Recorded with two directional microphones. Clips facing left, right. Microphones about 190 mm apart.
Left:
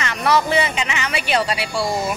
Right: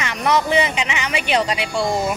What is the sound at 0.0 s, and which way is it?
Speech, 15° right (ahead or behind).